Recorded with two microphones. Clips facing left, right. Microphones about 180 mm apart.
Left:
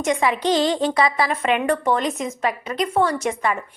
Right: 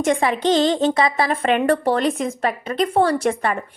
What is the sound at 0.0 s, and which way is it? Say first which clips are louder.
A woman's voice: right 2 dB; 30° right (ahead or behind).